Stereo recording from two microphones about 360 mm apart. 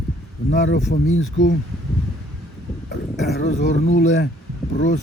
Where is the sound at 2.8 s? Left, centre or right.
Left.